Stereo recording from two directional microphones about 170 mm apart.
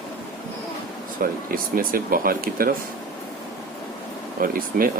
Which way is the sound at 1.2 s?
60° right (ahead or behind).